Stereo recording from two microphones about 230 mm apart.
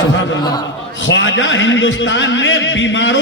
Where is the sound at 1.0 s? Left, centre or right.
Left.